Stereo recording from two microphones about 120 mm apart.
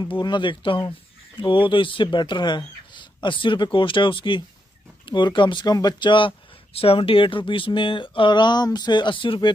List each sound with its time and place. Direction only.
0.2 s speech: 40° left (ahead or behind)